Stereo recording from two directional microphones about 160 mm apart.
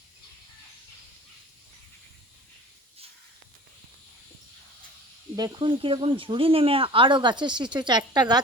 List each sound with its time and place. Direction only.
5.4 s speech: 25° right (ahead or behind)